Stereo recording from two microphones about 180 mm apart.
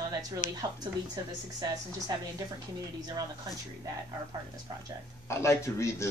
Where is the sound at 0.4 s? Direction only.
45° left (ahead or behind).